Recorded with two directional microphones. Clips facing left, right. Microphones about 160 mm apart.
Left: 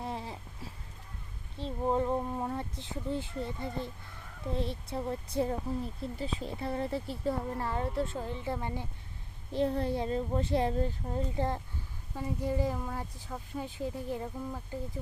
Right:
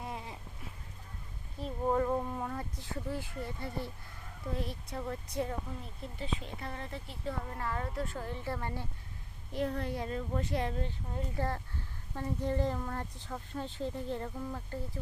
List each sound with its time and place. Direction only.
0.0 s a sound: 30° left (ahead or behind)
1.5 s speech: 25° left (ahead or behind)
9.5 s a child's voice: 30° left (ahead or behind)
11.3 s speech: 20° left (ahead or behind)